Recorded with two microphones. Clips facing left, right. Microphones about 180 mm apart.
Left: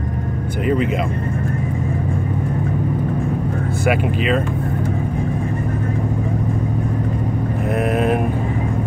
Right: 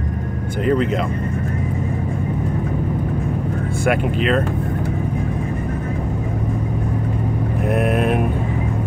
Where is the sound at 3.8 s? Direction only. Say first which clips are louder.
Even; 5° left (ahead or behind).